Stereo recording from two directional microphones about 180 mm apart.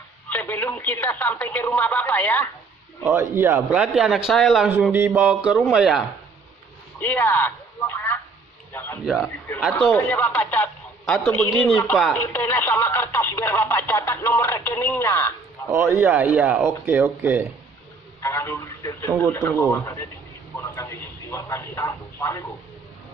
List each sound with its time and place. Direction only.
0.3 s speech: 10° left (ahead or behind)
3.1 s a man's voice: 10° right (ahead or behind)
7.0 s a sound: 10° left (ahead or behind)
9.0 s a man's voice: centre (ahead or behind)
9.8 s a man's voice: 10° left (ahead or behind)
15.7 s speech: 10° right (ahead or behind)
18.2 s a man's voice: 15° left (ahead or behind)